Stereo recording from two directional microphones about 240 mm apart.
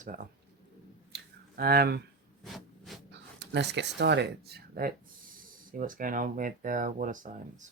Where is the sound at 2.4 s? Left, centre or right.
Centre.